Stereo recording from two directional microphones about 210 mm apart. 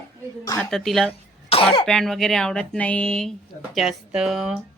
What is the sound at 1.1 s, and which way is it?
Cough, 25° left (ahead or behind).